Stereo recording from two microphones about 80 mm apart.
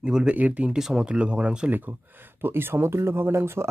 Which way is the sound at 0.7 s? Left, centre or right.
Centre.